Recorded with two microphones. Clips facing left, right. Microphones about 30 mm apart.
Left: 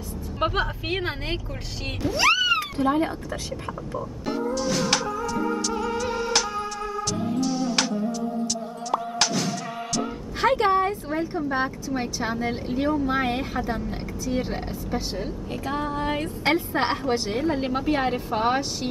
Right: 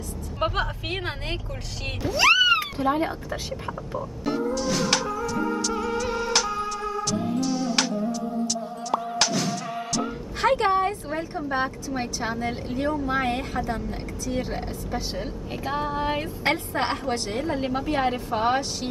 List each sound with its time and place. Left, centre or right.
0.4 s speech: centre
2.2 s speech: centre
3.6 s music: centre
8.9 s speech: centre
15.1 s a woman's voice: centre
16.7 s a woman's voice: centre